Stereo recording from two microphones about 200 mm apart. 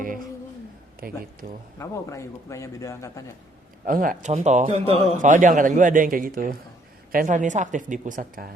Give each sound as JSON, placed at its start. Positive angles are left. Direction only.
{"t": 1.0, "sound": "speech", "side_deg": -45}
{"t": 1.8, "sound": "a man's voice", "side_deg": 15}
{"t": 3.8, "sound": "a man's voice", "side_deg": -45}